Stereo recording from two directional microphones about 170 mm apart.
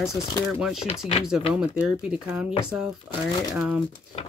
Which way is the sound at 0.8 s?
35° left (ahead or behind).